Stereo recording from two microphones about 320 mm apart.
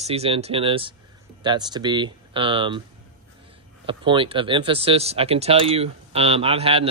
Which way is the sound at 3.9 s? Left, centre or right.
Centre.